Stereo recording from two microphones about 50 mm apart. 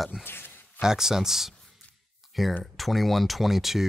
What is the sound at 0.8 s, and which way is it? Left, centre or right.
Speech, centre.